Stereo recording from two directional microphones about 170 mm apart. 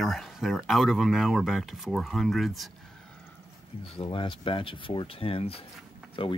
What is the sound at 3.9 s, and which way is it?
Speech, 30° left (ahead or behind).